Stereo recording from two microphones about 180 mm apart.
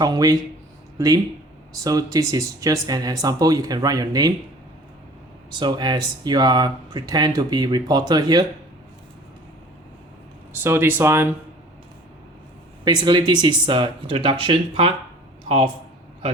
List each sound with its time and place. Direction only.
0.0 s speech: 20° right (ahead or behind)
5.5 s speech: 25° right (ahead or behind)
10.5 s speech: 10° right (ahead or behind)
12.8 s speech: 25° right (ahead or behind)